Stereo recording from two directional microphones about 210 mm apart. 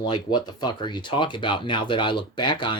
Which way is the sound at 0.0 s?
20° left (ahead or behind).